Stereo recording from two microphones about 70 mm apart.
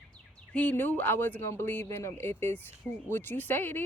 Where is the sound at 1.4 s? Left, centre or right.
Left.